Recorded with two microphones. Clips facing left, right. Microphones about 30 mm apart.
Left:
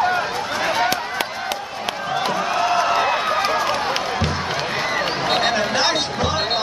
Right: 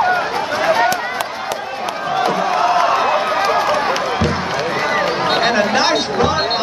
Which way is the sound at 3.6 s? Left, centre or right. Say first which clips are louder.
Right 5 dB; centre.